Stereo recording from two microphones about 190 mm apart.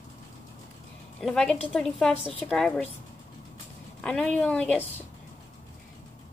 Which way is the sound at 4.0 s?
5° left (ahead or behind).